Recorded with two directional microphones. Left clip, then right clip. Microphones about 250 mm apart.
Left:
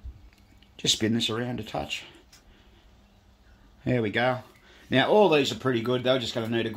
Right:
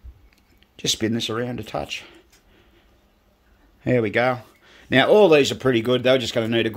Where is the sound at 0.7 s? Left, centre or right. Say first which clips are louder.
Right 2 dB; right.